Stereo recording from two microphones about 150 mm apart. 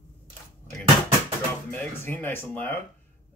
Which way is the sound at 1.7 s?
15° left (ahead or behind).